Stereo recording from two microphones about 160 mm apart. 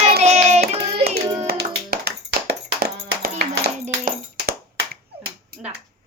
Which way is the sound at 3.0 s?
90° right.